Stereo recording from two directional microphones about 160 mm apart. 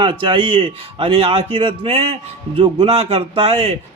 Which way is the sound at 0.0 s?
30° right (ahead or behind).